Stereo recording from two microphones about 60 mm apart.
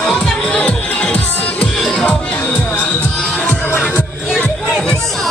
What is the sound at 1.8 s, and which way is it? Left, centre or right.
Music, centre.